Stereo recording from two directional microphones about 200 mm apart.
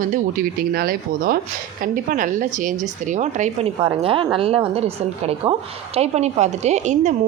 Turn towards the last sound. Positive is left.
turn(degrees=-35)  # may be behind; listen again after turning